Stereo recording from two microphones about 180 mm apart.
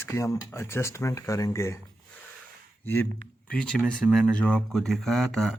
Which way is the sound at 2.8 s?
10° left (ahead or behind).